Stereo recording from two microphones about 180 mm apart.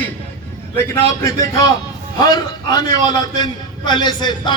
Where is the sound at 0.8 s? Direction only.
15° left (ahead or behind).